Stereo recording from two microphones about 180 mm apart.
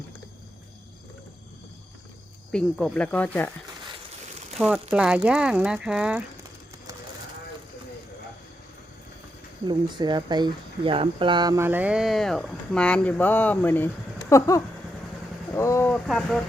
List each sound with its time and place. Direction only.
2.5 s speech: 5° left (ahead or behind)
4.5 s speech: centre (ahead or behind)
9.6 s speech: 25° right (ahead or behind); by 14.6 s 15° left (ahead or behind)
15.5 s a sound: 15° left (ahead or behind)
15.9 s speech: centre (ahead or behind)